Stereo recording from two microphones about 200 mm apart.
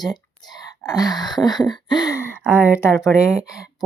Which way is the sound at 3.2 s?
15° left (ahead or behind).